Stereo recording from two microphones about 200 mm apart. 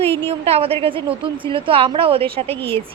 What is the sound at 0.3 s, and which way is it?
A woman's voice, 30° right (ahead or behind).